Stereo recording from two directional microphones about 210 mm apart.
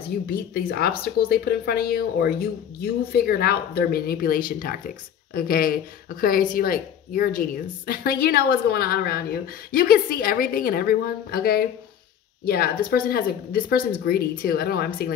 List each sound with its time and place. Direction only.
0.3 s speech: 45° left (ahead or behind)